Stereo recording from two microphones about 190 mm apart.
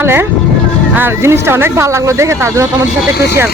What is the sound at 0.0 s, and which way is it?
Speech, 10° right (ahead or behind).